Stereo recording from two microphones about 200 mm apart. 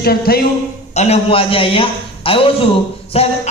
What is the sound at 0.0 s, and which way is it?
Speech, 50° left (ahead or behind).